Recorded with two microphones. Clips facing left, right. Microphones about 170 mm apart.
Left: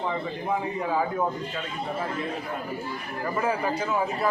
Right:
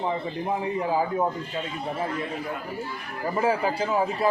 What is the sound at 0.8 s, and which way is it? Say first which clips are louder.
Speech: right 3 dB; 30° right (ahead or behind).